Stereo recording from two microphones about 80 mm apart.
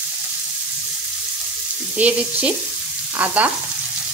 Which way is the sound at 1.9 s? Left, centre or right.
Centre.